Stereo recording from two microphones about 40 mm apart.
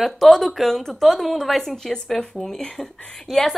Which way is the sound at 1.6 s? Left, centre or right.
Centre.